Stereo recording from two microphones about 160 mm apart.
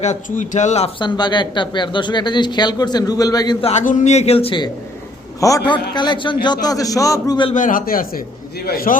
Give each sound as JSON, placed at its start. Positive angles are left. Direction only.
{"t": 0.0, "sound": "a woman's voice", "side_deg": 50}
{"t": 0.9, "sound": "speech", "side_deg": 30}
{"t": 3.6, "sound": "a woman's voice", "side_deg": 45}
{"t": 5.4, "sound": "speech", "side_deg": 20}
{"t": 7.5, "sound": "a man's voice", "side_deg": 55}